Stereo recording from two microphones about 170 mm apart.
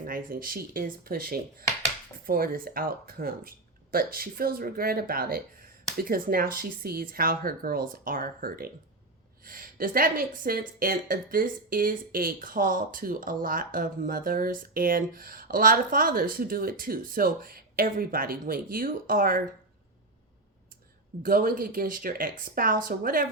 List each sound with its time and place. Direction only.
0.0 s a woman's voice: 55° right (ahead or behind)
21.2 s a woman's voice: 55° right (ahead or behind)